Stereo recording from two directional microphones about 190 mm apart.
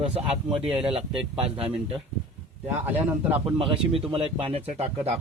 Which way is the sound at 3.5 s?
30° right (ahead or behind).